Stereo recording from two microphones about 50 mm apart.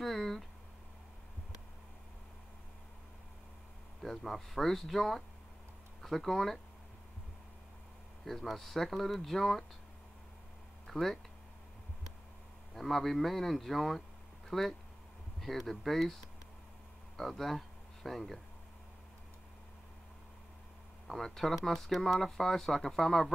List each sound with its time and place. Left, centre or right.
0.0 s a sound: centre
4.0 s speech: centre
8.3 s speech: centre
10.9 s speech: centre
12.7 s speech: centre
17.2 s speech: centre
21.1 s speech: centre